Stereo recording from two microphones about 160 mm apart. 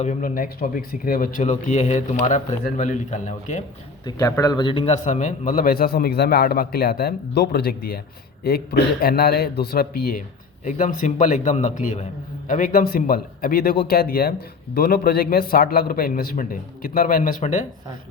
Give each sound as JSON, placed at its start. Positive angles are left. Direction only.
{"t": 0.0, "sound": "speech", "side_deg": 55}
{"t": 4.0, "sound": "a man's voice", "side_deg": 20}
{"t": 5.0, "sound": "a man's voice", "side_deg": 50}